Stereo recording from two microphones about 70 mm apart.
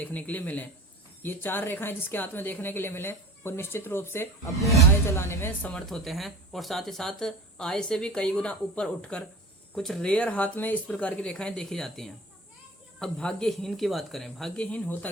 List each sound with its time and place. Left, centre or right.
0.0 s a woman's voice: left
5.7 s speech: centre
10.1 s speech: centre
14.5 s speech: centre